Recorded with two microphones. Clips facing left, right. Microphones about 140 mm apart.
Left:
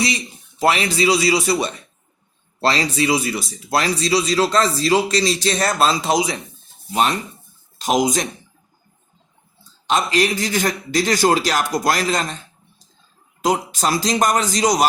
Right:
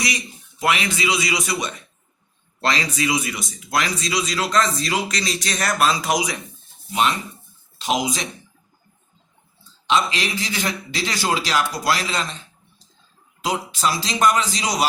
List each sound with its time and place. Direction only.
0.6 s speech: 35° left (ahead or behind)
6.9 s a man's voice: 40° left (ahead or behind)
9.8 s a man's voice: 45° left (ahead or behind)
13.4 s a man's voice: 45° left (ahead or behind)